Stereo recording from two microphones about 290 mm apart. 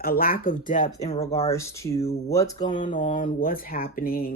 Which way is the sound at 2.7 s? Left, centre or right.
Left.